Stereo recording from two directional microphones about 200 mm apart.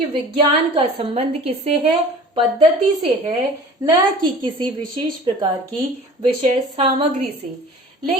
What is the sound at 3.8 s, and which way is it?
A woman's voice, 25° right (ahead or behind).